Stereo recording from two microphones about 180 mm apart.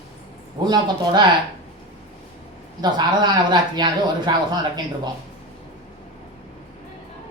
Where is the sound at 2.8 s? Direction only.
25° right (ahead or behind).